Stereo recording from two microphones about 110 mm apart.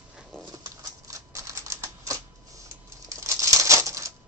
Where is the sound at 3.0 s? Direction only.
30° right (ahead or behind).